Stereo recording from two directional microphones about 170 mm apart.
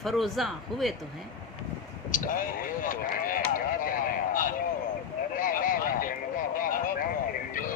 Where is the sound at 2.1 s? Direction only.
50° left (ahead or behind).